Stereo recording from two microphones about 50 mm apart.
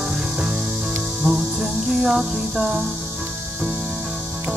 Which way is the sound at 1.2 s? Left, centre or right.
Right.